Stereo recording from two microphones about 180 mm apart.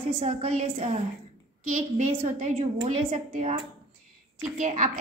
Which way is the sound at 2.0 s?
40° right (ahead or behind).